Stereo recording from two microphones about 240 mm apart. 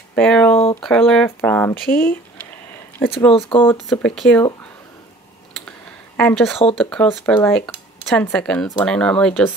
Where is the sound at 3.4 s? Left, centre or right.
Centre.